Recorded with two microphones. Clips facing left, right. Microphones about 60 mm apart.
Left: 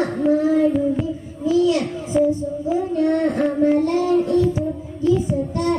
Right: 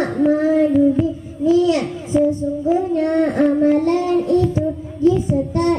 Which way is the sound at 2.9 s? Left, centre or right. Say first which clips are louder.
Right 2 dB; right.